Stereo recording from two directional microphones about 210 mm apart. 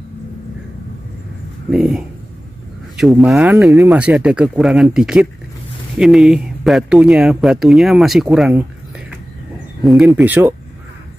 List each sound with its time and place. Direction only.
1.7 s speech: 5° right (ahead or behind)
9.8 s speech: centre (ahead or behind)